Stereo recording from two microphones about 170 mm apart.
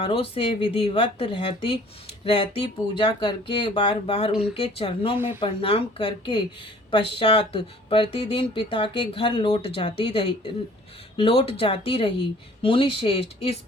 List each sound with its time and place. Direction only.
0.0 s speech: 35° left (ahead or behind)
5.1 s speech: 10° right (ahead or behind)
5.4 s speech: 35° left (ahead or behind)